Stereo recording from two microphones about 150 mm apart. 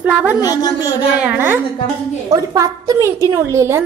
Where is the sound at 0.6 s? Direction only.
25° left (ahead or behind).